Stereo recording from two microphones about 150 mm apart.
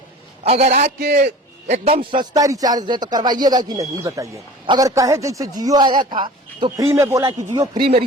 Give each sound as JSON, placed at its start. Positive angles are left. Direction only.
{"t": 0.4, "sound": "a man's voice", "side_deg": -45}
{"t": 0.9, "sound": "a man's voice", "side_deg": -90}
{"t": 1.2, "sound": "a man's voice", "side_deg": -50}
{"t": 6.7, "sound": "a man's voice", "side_deg": -20}